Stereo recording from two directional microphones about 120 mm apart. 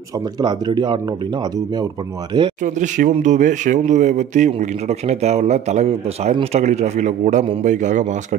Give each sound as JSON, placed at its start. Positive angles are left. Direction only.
{"t": 0.4, "sound": "speech", "side_deg": -35}
{"t": 2.6, "sound": "a man's voice", "side_deg": -90}